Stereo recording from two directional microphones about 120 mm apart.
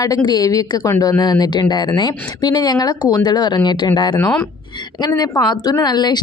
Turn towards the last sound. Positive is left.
turn(degrees=35)  # may be behind; listen again after turning